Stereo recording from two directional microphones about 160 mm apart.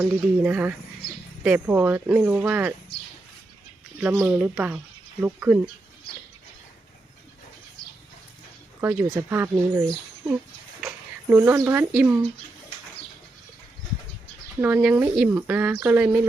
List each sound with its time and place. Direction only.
0.0 s speech: 10° right (ahead or behind)
4.0 s speech: 15° right (ahead or behind)
8.8 s speech: 15° right (ahead or behind)
10.8 s a sound: 10° right (ahead or behind)
14.6 s speech: 10° right (ahead or behind)